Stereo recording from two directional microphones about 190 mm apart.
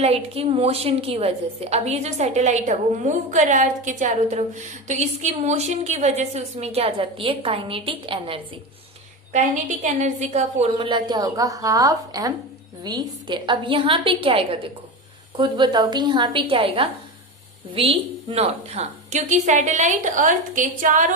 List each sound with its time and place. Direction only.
0.0 s a woman's voice: 30° right (ahead or behind)
9.8 s a woman's voice: 35° right (ahead or behind)